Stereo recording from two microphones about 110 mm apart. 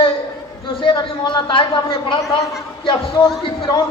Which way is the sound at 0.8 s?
45° left (ahead or behind).